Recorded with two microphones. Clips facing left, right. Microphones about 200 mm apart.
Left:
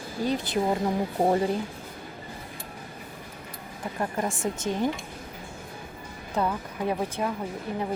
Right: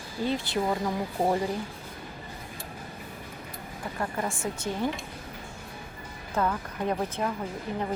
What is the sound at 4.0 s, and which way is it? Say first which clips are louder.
Speech: left 3 dB; 20° left (ahead or behind).